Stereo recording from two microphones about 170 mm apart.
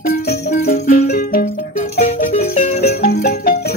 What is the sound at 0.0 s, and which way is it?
Music, 65° left (ahead or behind).